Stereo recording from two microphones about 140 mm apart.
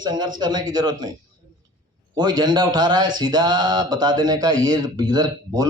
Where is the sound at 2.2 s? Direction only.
30° right (ahead or behind).